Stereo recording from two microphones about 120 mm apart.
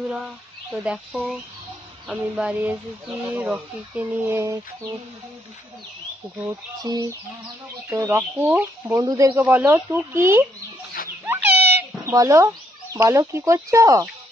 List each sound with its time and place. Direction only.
0.9 s speech: centre (ahead or behind); by 4.6 s 20° right (ahead or behind)
6.8 s speech: 35° right (ahead or behind); by 8.9 s 15° right (ahead or behind)
8.9 s speech: 35° right (ahead or behind)
9.4 s speech: 15° right (ahead or behind)
11.2 s a sound: 15° right (ahead or behind)
12.1 s speech: 30° right (ahead or behind)